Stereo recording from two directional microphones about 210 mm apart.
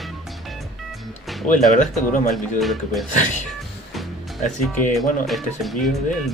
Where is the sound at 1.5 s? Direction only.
35° left (ahead or behind).